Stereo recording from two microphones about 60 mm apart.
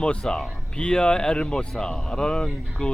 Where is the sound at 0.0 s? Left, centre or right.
Centre.